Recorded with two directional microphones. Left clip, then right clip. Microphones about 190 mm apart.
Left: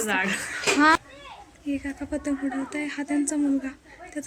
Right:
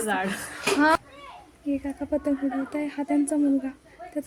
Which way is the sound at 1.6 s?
15° right (ahead or behind).